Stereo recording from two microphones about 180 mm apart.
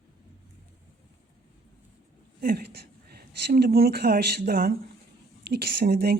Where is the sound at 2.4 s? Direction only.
60° right (ahead or behind).